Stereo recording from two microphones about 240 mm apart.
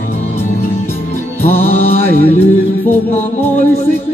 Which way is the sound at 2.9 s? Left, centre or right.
Centre.